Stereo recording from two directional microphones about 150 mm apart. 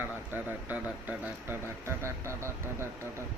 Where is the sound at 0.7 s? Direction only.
10° right (ahead or behind).